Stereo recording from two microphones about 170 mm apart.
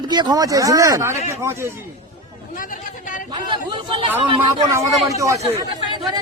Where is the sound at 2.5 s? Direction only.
50° left (ahead or behind).